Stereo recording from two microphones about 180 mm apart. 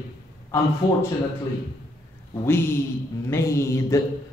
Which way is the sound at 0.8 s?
25° left (ahead or behind).